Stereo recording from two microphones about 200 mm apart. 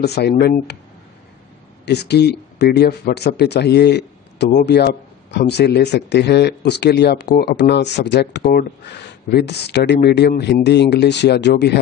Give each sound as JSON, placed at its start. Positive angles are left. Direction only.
{"t": 0.0, "sound": "speech", "side_deg": 55}
{"t": 1.9, "sound": "a man's voice", "side_deg": 55}